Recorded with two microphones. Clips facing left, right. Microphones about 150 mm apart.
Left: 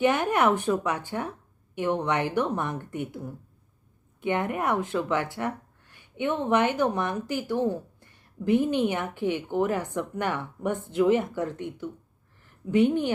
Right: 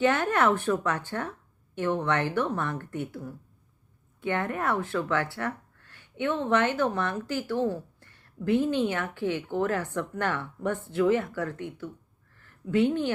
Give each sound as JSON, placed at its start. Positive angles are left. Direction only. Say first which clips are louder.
{"t": 0.0, "sound": "speech", "louder": "left 1 dB", "side_deg": 15}